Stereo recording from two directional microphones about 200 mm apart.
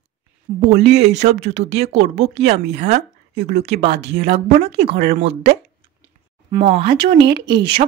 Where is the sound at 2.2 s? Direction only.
55° right (ahead or behind).